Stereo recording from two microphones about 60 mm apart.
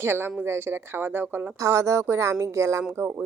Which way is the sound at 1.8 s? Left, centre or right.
Right.